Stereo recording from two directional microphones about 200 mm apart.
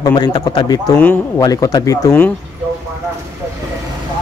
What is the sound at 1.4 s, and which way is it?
Speech, 20° left (ahead or behind).